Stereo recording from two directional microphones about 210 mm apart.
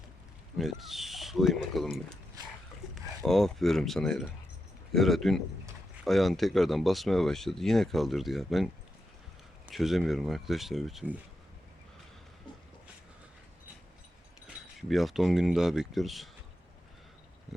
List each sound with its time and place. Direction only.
0.5 s speech: centre (ahead or behind)
9.7 s speech: centre (ahead or behind)
14.4 s speech: centre (ahead or behind)